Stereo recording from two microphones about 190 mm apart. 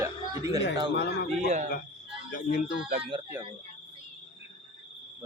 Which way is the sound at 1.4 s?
40° right (ahead or behind).